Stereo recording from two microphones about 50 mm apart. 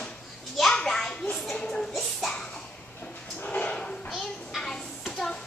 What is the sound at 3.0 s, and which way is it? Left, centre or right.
Dog, left.